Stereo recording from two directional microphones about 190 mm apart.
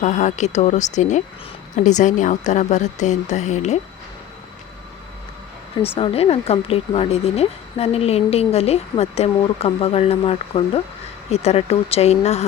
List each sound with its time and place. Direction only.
0.0 s a woman's voice: 40° left (ahead or behind)
6.0 s a woman's voice: 30° left (ahead or behind)